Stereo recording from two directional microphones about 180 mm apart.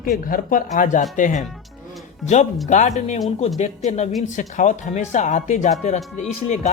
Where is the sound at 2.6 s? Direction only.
45° left (ahead or behind).